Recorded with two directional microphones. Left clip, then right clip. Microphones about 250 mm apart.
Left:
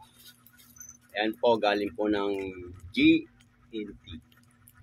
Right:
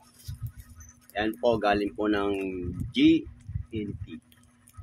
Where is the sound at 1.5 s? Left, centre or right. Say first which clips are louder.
Right 1 dB; centre.